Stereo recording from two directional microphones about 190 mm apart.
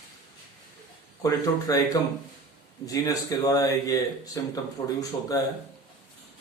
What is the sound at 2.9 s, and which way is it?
Speech, 20° left (ahead or behind).